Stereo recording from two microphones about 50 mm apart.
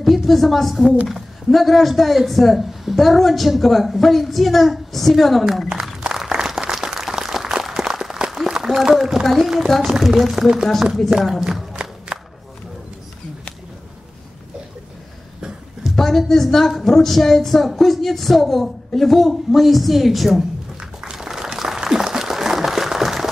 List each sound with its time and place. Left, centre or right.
0.0 s a woman's voice: centre
6.0 s applause: centre
9.8 s a woman's voice: centre
11.7 s battle cry: right
15.8 s a woman's voice: centre
21.0 s applause: centre